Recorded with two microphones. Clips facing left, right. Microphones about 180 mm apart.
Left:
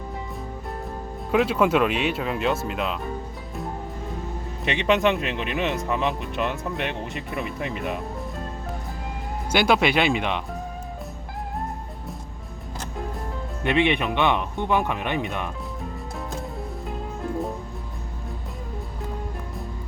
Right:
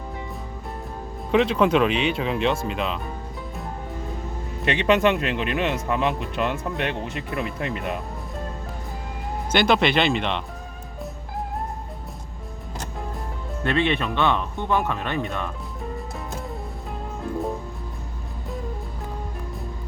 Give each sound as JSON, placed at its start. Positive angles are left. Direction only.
{"t": 1.3, "sound": "speech", "side_deg": 5}
{"t": 4.6, "sound": "speech", "side_deg": 0}
{"t": 9.5, "sound": "speech", "side_deg": 10}
{"t": 13.7, "sound": "speech", "side_deg": 15}